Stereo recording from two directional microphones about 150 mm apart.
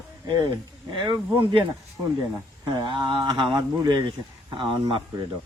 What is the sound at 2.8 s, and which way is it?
Speech, 35° right (ahead or behind).